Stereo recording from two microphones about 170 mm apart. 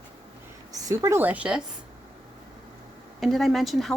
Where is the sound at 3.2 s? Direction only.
Centre (ahead or behind).